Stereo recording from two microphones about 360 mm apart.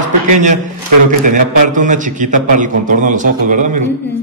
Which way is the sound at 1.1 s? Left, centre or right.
Right.